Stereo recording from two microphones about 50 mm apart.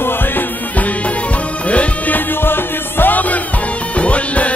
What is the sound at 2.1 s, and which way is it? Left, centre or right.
Music, left.